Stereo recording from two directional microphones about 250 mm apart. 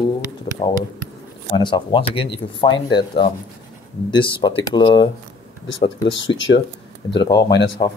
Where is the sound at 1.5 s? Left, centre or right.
Centre.